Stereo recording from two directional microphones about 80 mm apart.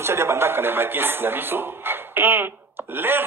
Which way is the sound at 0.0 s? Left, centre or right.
Right.